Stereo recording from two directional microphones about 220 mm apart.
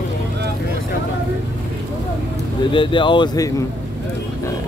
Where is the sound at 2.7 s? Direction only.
20° left (ahead or behind).